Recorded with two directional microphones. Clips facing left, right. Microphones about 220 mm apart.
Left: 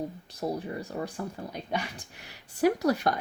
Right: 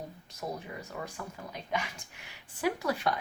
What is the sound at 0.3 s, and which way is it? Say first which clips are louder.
Speech: left 5 dB; 35° left (ahead or behind).